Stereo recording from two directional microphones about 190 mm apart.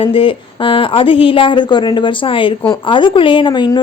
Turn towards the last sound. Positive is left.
turn(degrees=20)  # may be behind; listen again after turning